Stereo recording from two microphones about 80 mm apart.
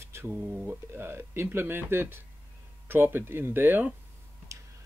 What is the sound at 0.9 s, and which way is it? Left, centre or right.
Speech, right.